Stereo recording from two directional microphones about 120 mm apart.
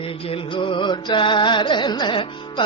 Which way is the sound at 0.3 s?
45° left (ahead or behind).